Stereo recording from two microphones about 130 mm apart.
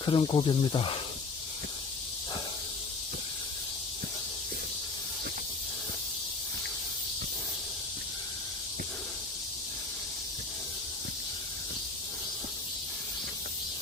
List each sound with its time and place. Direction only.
0.0 s speech: 40° left (ahead or behind)